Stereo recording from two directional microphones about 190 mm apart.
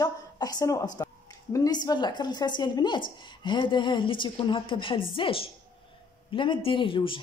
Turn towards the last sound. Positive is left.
turn(degrees=25)  # may be behind; listen again after turning